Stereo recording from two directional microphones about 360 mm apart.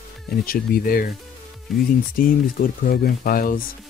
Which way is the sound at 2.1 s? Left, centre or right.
Left.